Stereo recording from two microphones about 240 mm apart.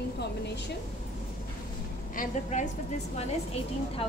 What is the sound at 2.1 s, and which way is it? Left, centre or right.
A woman's voice, left.